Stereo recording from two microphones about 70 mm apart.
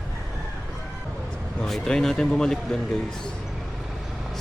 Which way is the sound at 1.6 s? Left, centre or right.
Centre.